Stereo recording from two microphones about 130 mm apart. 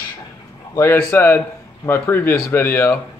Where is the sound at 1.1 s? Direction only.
15° left (ahead or behind).